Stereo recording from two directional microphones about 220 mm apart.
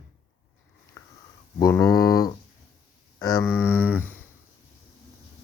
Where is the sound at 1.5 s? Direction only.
15° left (ahead or behind).